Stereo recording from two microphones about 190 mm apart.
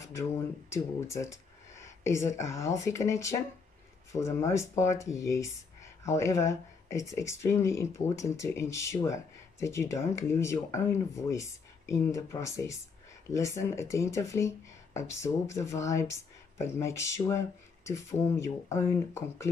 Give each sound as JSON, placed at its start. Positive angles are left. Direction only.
{"t": 0.1, "sound": "speech", "side_deg": 15}